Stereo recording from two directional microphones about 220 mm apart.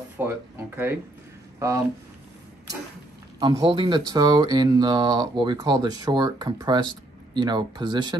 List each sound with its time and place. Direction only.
0.2 s speech: 10° right (ahead or behind)
3.3 s speech: 20° right (ahead or behind)